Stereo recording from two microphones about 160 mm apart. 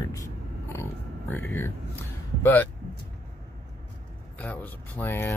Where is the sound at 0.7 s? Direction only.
15° left (ahead or behind).